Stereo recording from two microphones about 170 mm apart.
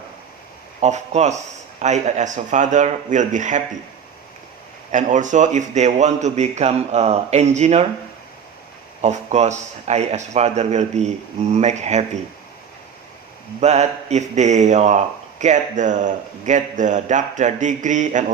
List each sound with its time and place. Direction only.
0.8 s a man's voice: 40° right (ahead or behind)
4.9 s a man's voice: 45° right (ahead or behind)
9.0 s a man's voice: 40° right (ahead or behind)
13.6 s a man's voice: 40° right (ahead or behind)